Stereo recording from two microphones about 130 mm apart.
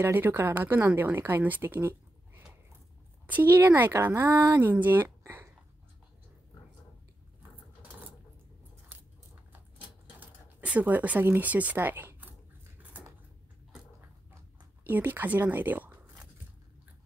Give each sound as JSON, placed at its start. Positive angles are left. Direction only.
{"t": 0.0, "sound": "speech", "side_deg": -15}
{"t": 4.6, "sound": "speech", "side_deg": -15}
{"t": 10.2, "sound": "a sound", "side_deg": -10}
{"t": 14.9, "sound": "speech", "side_deg": -15}